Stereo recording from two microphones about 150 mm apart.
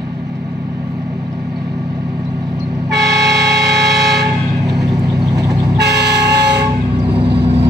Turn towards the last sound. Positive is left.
turn(degrees=-90)